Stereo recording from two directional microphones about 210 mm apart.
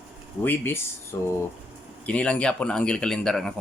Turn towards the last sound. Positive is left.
turn(degrees=5)  # may be behind; listen again after turning